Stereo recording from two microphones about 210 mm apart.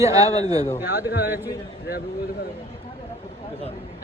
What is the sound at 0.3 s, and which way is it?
Speech, 30° left (ahead or behind).